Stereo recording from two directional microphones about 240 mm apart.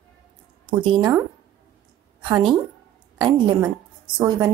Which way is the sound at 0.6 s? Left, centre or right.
Centre.